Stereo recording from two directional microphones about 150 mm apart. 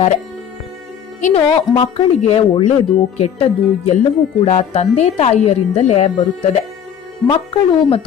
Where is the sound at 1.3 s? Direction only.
40° left (ahead or behind).